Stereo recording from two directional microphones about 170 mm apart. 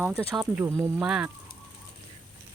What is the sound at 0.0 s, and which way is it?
Speech, 10° right (ahead or behind).